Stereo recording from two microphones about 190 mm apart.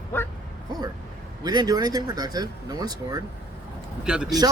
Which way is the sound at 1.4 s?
20° right (ahead or behind).